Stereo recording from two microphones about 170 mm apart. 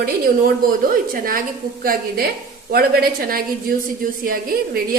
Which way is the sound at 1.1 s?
55° right (ahead or behind).